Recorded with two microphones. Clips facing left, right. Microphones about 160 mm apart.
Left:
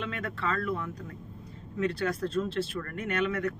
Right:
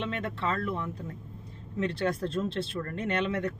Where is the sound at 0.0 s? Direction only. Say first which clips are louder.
Right 2 dB; 30° right (ahead or behind).